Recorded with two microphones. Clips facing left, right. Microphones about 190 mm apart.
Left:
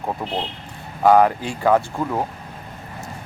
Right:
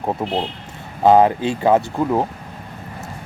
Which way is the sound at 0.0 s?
25° right (ahead or behind).